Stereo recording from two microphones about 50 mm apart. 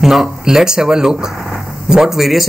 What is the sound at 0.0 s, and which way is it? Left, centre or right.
Speech, centre.